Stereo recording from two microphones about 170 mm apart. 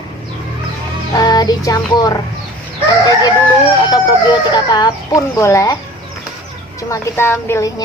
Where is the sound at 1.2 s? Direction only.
25° left (ahead or behind).